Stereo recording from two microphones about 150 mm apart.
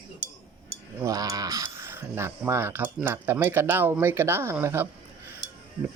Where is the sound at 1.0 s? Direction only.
20° right (ahead or behind).